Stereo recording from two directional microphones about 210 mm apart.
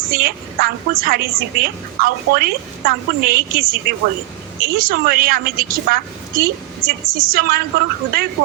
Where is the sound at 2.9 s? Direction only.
45° right (ahead or behind).